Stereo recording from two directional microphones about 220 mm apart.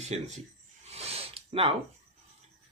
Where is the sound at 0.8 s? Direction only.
30° right (ahead or behind).